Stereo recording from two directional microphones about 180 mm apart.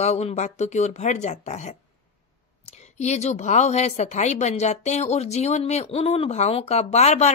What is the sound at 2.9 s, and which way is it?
Speech, 40° left (ahead or behind).